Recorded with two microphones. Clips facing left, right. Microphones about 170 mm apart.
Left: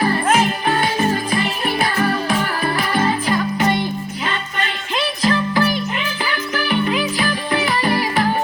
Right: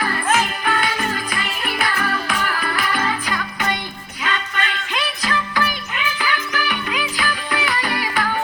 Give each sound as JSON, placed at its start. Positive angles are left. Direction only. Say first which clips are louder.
{"t": 0.0, "sound": "music", "louder": "left 4 dB", "side_deg": 25}